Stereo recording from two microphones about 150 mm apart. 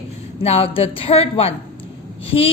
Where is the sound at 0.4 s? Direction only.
40° left (ahead or behind).